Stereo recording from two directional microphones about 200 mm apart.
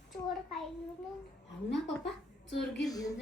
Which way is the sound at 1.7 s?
60° left (ahead or behind).